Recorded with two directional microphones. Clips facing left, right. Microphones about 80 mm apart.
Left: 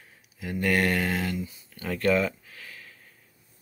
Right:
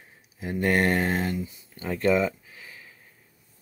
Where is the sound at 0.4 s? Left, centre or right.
Right.